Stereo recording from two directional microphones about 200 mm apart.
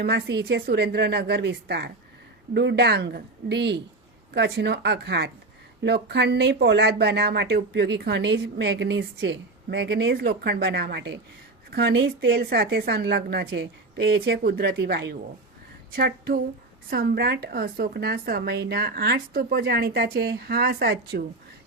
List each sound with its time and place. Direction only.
0.0 s a woman's voice: 55° right (ahead or behind)